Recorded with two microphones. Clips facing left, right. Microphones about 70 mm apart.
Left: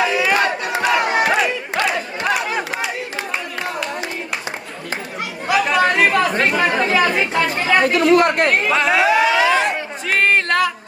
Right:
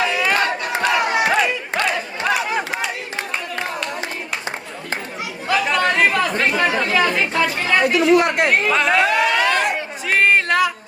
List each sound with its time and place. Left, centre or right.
0.0 s crowd: centre
5.5 s chatter: centre
8.0 s speech: left
8.6 s chatter: centre
10.1 s a sound: centre